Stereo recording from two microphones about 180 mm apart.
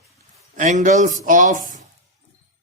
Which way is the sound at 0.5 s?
45° right (ahead or behind).